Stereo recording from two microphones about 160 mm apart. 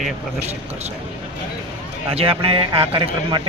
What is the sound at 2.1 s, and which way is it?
Speech, 35° right (ahead or behind).